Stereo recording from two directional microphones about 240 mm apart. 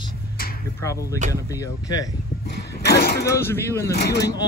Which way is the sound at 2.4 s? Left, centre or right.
Left.